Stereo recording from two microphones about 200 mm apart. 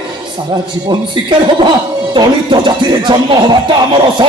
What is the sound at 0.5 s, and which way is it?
Speech, 25° right (ahead or behind).